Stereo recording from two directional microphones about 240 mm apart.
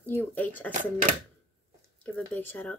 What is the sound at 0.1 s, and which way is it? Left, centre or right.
Speech, centre.